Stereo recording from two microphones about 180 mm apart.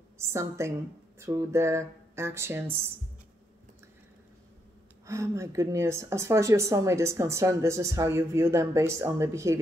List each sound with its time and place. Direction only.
0.2 s a woman's voice: 15° right (ahead or behind)
5.0 s a woman's voice: 15° right (ahead or behind)